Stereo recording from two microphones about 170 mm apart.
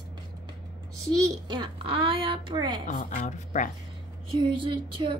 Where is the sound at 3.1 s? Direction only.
45° left (ahead or behind).